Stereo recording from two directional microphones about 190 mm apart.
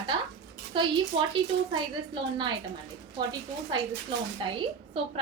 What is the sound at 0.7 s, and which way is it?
A woman's voice, 25° right (ahead or behind).